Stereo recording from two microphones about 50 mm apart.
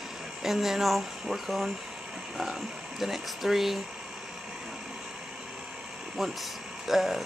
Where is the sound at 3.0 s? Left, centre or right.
Centre.